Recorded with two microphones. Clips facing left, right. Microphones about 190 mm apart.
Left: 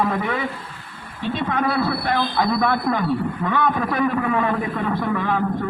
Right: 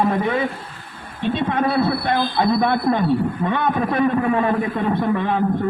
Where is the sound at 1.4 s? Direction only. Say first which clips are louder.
Right 2 dB; 25° right (ahead or behind).